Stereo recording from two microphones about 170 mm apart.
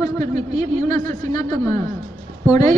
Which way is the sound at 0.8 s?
20° left (ahead or behind).